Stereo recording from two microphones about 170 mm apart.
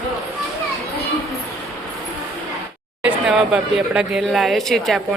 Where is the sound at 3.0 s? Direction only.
5° right (ahead or behind).